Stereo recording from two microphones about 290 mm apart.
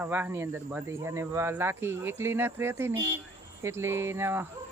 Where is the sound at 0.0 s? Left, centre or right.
Centre.